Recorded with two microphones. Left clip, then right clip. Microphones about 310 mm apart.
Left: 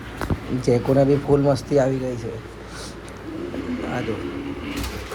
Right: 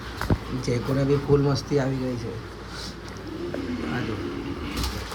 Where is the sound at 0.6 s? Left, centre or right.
Centre.